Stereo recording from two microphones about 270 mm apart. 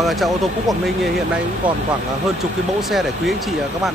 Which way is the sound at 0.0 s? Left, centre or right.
Centre.